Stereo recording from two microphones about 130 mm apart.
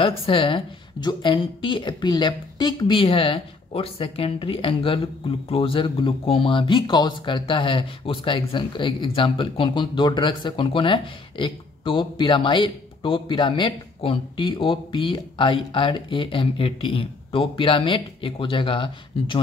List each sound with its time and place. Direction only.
0.0 s speech: 45° left (ahead or behind)